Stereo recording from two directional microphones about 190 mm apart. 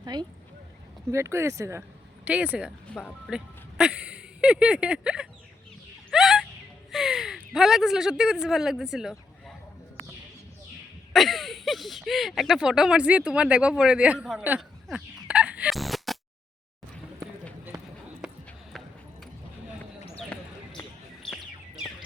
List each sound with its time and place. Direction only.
0.0 s speech: 20° right (ahead or behind); by 5.3 s 5° right (ahead or behind)
6.1 s a sound: centre (ahead or behind)
6.9 s speech: centre (ahead or behind)
11.1 s speech: centre (ahead or behind)
18.2 s run: centre (ahead or behind)
20.3 s basketball bounce: 5° left (ahead or behind)